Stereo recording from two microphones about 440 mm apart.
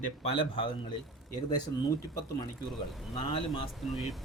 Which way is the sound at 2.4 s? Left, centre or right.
Centre.